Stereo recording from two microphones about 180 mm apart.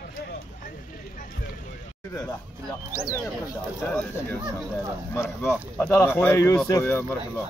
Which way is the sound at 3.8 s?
10° left (ahead or behind).